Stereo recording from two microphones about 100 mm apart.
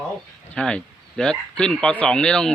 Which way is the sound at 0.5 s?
10° left (ahead or behind).